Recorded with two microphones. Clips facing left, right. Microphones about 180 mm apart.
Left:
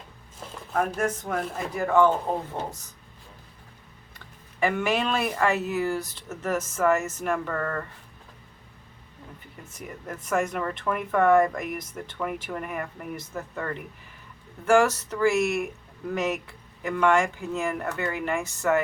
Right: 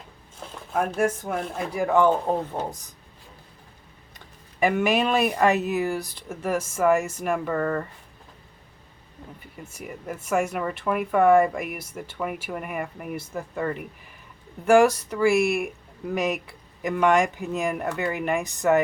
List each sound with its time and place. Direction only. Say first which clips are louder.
0.9 s speech: right 3 dB; 10° right (ahead or behind)
4.6 s speech: right 3 dB; 15° right (ahead or behind)
9.6 s speech: right 3 dB; 10° right (ahead or behind)